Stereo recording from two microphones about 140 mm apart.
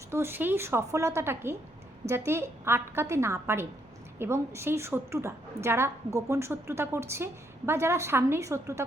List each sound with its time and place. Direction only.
0.1 s a woman's voice: 15° right (ahead or behind)